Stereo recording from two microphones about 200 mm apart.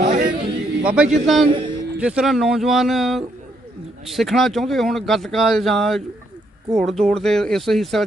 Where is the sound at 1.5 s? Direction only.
25° right (ahead or behind).